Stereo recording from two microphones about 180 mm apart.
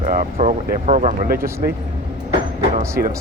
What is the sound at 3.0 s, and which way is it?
Speech, 60° right (ahead or behind).